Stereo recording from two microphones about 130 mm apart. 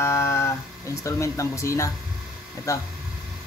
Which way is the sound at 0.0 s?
20° left (ahead or behind).